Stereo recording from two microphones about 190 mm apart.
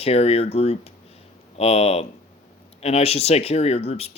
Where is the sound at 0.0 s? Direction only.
30° left (ahead or behind).